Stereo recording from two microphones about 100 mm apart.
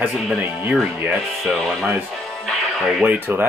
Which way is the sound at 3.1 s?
20° right (ahead or behind).